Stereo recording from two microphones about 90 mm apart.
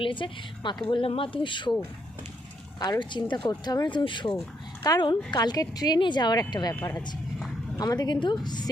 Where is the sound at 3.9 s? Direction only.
60° left (ahead or behind).